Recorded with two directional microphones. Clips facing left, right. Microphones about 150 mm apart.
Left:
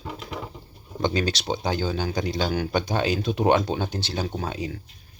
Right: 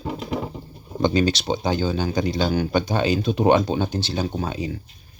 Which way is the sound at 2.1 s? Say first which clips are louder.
Right 4 dB; 5° right (ahead or behind).